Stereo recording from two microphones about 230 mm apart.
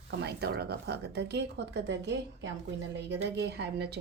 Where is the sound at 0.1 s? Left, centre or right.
Right.